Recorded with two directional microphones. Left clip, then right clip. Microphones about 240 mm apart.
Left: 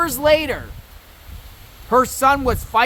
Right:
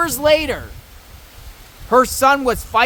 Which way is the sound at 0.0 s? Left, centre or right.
Centre.